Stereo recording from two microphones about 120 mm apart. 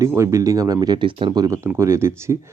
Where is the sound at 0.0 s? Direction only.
25° right (ahead or behind).